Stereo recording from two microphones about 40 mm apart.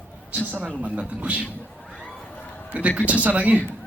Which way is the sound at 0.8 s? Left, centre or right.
Right.